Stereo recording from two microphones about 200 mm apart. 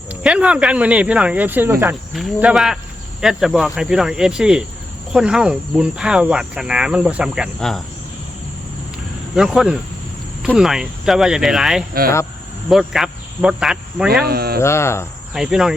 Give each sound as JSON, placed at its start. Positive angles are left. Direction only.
{"t": 0.1, "sound": "speech", "side_deg": -5}
{"t": 9.3, "sound": "speech", "side_deg": 0}
{"t": 14.3, "sound": "speech", "side_deg": -50}
{"t": 14.6, "sound": "cricket", "side_deg": 15}
{"t": 15.3, "sound": "speech", "side_deg": 0}